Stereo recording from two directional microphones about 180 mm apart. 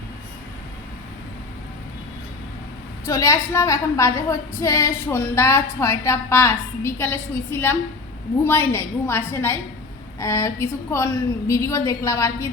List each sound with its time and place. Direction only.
3.1 s a woman's voice: 15° left (ahead or behind)